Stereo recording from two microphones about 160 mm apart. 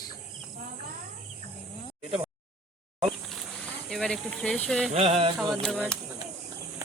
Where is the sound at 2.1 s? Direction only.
35° right (ahead or behind).